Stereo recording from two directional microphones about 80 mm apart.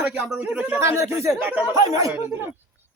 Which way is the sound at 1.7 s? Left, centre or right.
Right.